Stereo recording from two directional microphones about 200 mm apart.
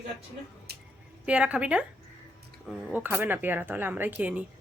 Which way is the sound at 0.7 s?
55° right (ahead or behind).